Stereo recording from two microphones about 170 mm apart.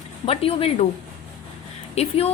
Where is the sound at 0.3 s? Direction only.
35° left (ahead or behind).